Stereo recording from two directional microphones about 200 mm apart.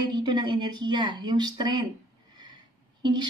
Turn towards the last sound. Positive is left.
turn(degrees=-20)  # may be behind; listen again after turning